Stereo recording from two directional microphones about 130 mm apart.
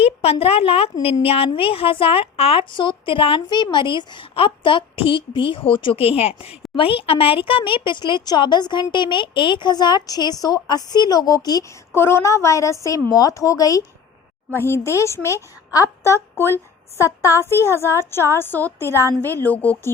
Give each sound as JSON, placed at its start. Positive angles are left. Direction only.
{"t": 0.0, "sound": "speech", "side_deg": 50}
{"t": 11.9, "sound": "a woman's voice", "side_deg": 20}
{"t": 17.4, "sound": "a woman's voice", "side_deg": 20}